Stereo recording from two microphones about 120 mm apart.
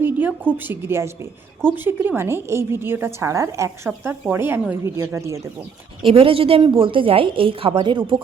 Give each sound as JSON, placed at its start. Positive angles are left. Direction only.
{"t": 0.0, "sound": "a woman's voice", "side_deg": -15}
{"t": 6.0, "sound": "a woman's voice", "side_deg": -50}